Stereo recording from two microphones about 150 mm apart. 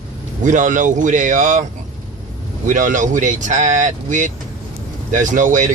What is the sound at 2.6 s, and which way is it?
Speech, 60° right (ahead or behind).